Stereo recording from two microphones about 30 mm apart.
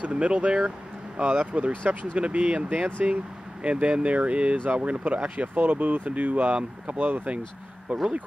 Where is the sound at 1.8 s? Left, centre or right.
Right.